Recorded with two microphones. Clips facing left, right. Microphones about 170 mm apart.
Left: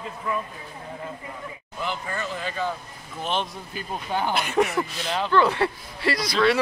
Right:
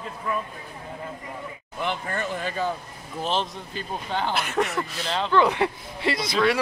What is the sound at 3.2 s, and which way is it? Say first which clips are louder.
Speech: right 1 dB; 30° right (ahead or behind).